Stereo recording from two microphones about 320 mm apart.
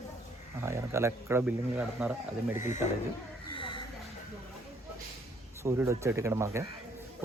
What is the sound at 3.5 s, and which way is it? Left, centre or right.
Music, centre.